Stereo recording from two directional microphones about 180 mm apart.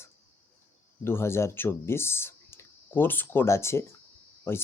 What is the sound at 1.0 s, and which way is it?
Speech, 15° left (ahead or behind).